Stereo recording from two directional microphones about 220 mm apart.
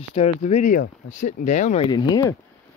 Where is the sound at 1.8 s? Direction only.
20° left (ahead or behind).